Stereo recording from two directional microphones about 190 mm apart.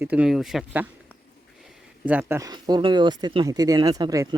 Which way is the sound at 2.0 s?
10° right (ahead or behind).